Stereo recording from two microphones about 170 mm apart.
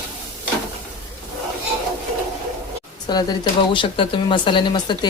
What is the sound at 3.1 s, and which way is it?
Speech, 25° left (ahead or behind).